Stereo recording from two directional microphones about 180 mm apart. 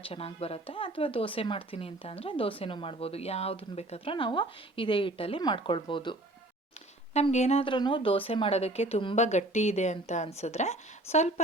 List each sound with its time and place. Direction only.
0.0 s speech: 30° left (ahead or behind)
7.1 s speech: 40° left (ahead or behind)